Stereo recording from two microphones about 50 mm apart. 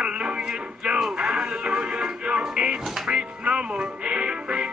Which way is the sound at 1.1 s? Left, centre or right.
Centre.